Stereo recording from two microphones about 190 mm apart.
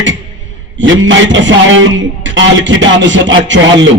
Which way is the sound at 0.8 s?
85° right.